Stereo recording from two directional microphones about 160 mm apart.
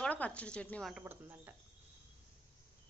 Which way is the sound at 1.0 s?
10° right (ahead or behind).